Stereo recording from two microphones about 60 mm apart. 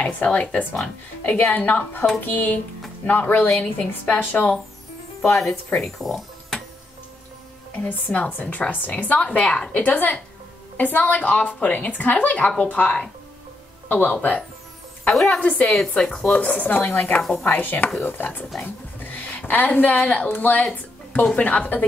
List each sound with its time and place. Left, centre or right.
0.0 s a woman's voice: left
5.8 s speech: centre
7.7 s a woman's voice: left
15.8 s a woman's voice: centre; by 21.8 s left